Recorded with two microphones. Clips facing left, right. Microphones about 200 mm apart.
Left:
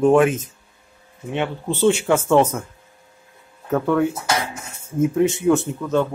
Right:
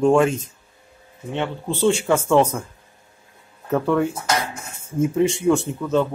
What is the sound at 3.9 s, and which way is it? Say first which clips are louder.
Speech: left 2 dB; 5° left (ahead or behind).